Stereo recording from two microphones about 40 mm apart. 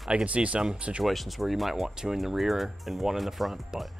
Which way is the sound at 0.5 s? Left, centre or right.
Right.